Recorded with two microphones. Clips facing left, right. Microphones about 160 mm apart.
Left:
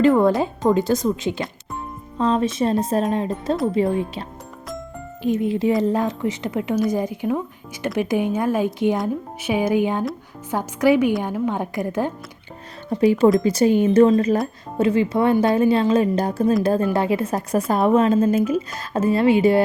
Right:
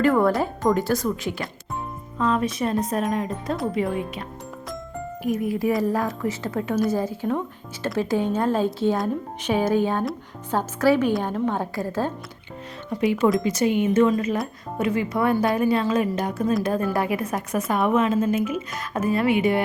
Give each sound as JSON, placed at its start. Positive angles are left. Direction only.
{"t": 0.0, "sound": "a woman's voice", "side_deg": 20}
{"t": 13.0, "sound": "a woman's voice", "side_deg": 35}